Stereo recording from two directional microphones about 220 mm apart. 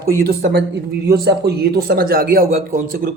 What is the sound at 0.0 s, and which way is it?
Speech, 45° right (ahead or behind).